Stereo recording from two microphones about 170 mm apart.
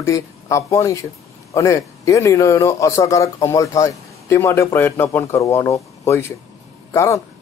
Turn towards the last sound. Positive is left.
turn(degrees=15)  # may be behind; listen again after turning